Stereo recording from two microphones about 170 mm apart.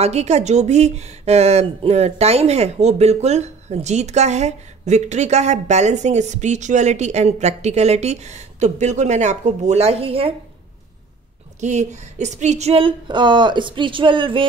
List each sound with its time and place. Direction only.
0.0 s speech: 40° right (ahead or behind)
11.6 s speech: 45° right (ahead or behind)